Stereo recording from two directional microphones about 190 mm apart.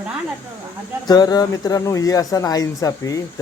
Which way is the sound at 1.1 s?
20° left (ahead or behind).